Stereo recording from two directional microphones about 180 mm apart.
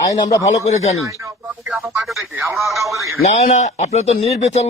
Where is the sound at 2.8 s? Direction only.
15° right (ahead or behind).